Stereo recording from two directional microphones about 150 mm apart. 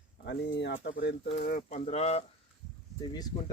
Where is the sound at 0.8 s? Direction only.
65° left (ahead or behind); by 2.2 s 45° left (ahead or behind).